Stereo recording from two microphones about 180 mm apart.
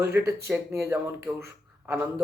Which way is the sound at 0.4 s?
15° right (ahead or behind).